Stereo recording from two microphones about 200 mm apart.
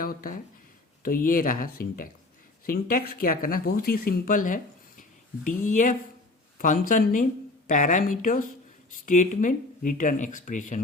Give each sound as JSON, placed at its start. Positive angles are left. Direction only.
{"t": 0.0, "sound": "speech", "side_deg": 45}